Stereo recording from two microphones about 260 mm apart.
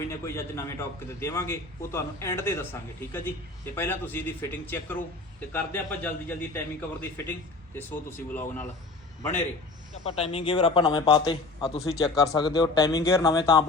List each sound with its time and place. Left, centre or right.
0.1 s a man's voice: centre
10.1 s a man's voice: left